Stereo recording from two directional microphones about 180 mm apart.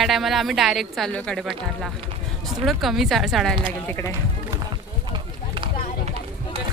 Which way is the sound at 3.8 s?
10° left (ahead or behind).